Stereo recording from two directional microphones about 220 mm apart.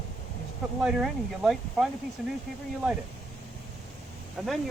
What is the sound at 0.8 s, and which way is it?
Speech, centre (ahead or behind).